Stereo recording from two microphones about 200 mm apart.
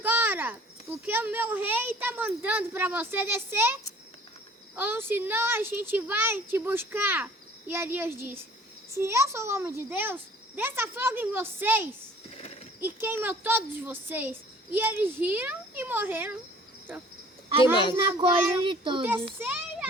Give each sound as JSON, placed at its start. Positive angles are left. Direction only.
{"t": 0.0, "sound": "a child's voice", "side_deg": -10}
{"t": 12.3, "sound": "a sound", "side_deg": 30}
{"t": 12.8, "sound": "a child's voice", "side_deg": -10}
{"t": 17.6, "sound": "a child's voice", "side_deg": 25}
{"t": 18.2, "sound": "speech", "side_deg": -25}
{"t": 19.0, "sound": "a child's voice", "side_deg": -10}